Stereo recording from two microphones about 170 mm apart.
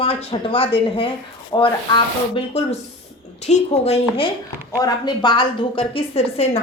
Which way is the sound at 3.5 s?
40° left (ahead or behind).